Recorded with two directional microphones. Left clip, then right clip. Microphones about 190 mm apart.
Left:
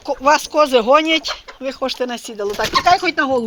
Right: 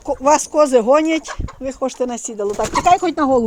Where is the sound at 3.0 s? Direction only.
45° right (ahead or behind).